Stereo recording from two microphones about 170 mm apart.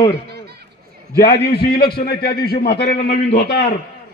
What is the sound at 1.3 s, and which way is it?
A man's voice, 70° left (ahead or behind).